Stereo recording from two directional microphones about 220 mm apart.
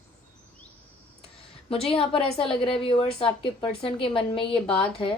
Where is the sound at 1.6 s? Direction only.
25° left (ahead or behind).